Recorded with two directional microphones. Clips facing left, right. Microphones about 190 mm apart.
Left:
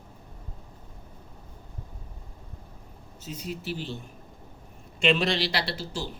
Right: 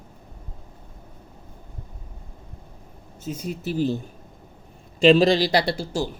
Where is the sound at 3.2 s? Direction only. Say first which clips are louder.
Right 6 dB; 50° right (ahead or behind).